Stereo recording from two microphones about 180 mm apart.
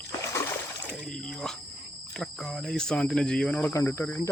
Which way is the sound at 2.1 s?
Centre (ahead or behind).